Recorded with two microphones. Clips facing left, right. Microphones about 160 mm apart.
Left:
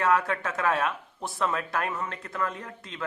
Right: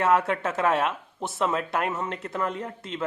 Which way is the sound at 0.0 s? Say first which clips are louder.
Right 2 dB; 25° right (ahead or behind).